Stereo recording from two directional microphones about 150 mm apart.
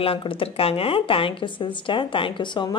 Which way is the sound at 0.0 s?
35° left (ahead or behind).